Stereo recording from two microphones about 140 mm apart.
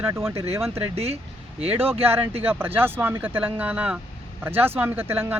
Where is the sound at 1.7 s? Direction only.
15° right (ahead or behind).